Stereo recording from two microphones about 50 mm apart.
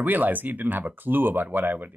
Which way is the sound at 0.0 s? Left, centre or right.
Right.